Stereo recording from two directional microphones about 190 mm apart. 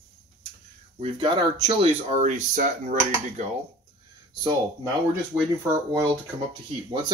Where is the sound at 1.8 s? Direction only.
40° right (ahead or behind).